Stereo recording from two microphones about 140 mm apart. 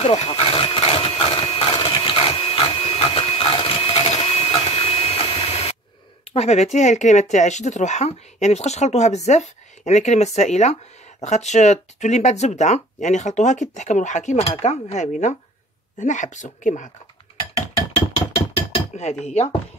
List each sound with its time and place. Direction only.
0.0 s a sound: 45° left (ahead or behind)
6.3 s speech: 50° left (ahead or behind)
18.3 s dishes: 50° left (ahead or behind)
19.2 s speech: 50° left (ahead or behind)